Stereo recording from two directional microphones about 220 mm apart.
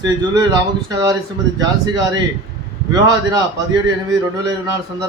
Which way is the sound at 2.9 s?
20° right (ahead or behind).